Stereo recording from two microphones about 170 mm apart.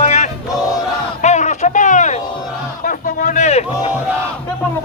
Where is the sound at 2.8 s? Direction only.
50° left (ahead or behind).